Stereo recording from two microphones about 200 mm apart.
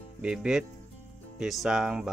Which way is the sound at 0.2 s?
5° right (ahead or behind).